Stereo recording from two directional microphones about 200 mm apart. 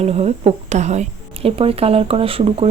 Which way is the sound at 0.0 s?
30° right (ahead or behind).